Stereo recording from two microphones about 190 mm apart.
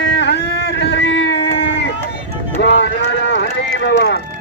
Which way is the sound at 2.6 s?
70° left (ahead or behind).